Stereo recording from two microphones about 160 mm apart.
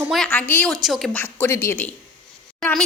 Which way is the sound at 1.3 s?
15° left (ahead or behind).